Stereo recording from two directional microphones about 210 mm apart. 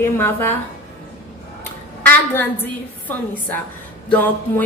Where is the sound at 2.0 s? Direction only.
10° left (ahead or behind).